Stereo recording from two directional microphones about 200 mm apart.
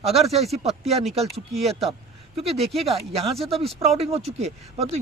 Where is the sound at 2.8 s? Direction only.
30° right (ahead or behind).